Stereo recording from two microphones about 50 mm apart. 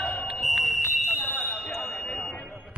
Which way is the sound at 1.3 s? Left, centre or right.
Left.